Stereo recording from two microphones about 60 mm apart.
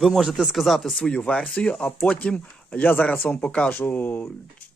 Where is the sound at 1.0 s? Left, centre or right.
Centre.